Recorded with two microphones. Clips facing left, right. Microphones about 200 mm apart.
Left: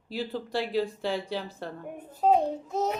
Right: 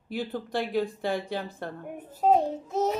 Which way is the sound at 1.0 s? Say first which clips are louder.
Right 1 dB; 55° right (ahead or behind).